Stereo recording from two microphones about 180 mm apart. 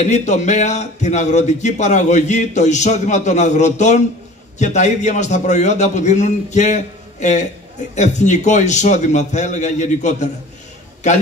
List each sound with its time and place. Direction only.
0.0 s a man's voice: 40° left (ahead or behind)